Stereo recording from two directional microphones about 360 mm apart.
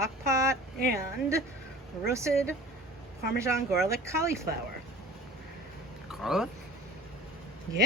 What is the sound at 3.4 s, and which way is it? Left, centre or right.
Speech, centre.